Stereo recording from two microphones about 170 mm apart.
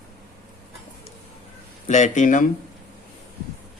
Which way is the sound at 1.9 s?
45° left (ahead or behind).